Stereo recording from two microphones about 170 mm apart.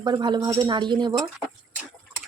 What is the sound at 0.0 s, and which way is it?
Speech, 25° right (ahead or behind).